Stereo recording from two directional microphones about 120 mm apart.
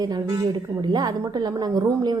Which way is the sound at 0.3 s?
35° right (ahead or behind).